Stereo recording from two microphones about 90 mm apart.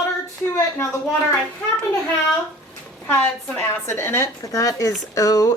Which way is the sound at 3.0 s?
25° left (ahead or behind).